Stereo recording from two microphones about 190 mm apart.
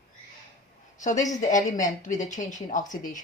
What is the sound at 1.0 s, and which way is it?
Speech, 40° left (ahead or behind).